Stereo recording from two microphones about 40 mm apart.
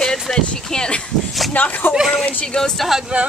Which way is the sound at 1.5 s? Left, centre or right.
Left.